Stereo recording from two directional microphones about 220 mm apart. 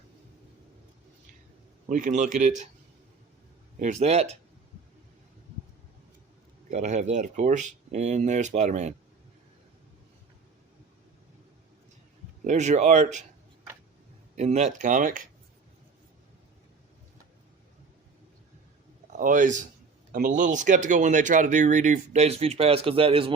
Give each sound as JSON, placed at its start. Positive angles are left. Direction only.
{"t": 1.9, "sound": "speech", "side_deg": -35}
{"t": 3.8, "sound": "speech", "side_deg": -35}
{"t": 6.7, "sound": "speech", "side_deg": -30}
{"t": 12.5, "sound": "speech", "side_deg": -30}
{"t": 14.3, "sound": "speech", "side_deg": -30}
{"t": 19.1, "sound": "speech", "side_deg": -35}